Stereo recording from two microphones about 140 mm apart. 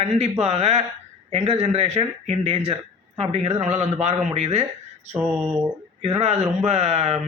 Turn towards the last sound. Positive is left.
turn(degrees=-50)  # may be behind; listen again after turning